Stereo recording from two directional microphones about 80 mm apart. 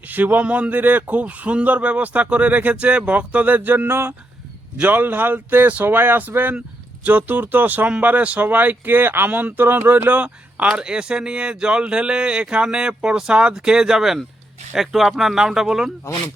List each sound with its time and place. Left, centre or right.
0.1 s speech: right; by 15.9 s centre